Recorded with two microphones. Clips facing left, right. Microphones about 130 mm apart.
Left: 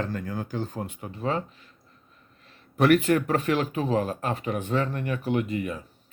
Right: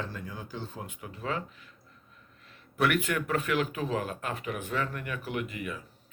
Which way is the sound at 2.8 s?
35° left (ahead or behind).